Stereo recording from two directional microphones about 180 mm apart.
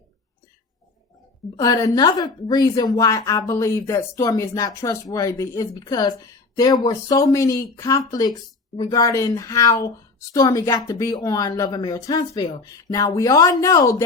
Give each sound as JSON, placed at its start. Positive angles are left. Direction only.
{"t": 1.5, "sound": "a woman's voice", "side_deg": 20}